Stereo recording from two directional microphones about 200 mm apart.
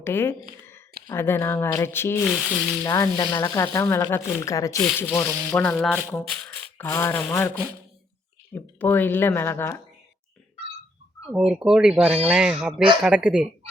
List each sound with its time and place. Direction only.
0.0 s speech: 10° left (ahead or behind)
2.8 s speech: 15° left (ahead or behind)
6.0 s speech: 10° right (ahead or behind)
6.3 s speech: 10° left (ahead or behind)
8.5 s speech: 10° left (ahead or behind)
11.3 s speech: 5° right (ahead or behind)